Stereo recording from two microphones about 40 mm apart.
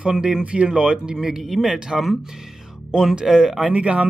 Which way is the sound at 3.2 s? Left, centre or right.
Centre.